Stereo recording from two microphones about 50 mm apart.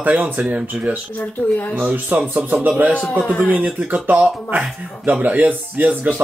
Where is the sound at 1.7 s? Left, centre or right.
Right.